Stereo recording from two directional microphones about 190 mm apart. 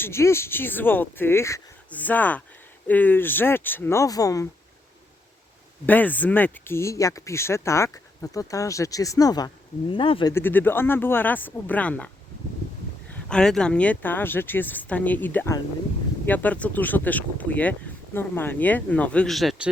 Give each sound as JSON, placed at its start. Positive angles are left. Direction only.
{"t": 0.0, "sound": "speech", "side_deg": 15}
{"t": 5.8, "sound": "speech", "side_deg": 10}
{"t": 10.3, "sound": "speech", "side_deg": 10}
{"t": 13.2, "sound": "speech", "side_deg": 5}